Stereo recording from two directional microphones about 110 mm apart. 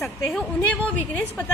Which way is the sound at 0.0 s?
Centre (ahead or behind).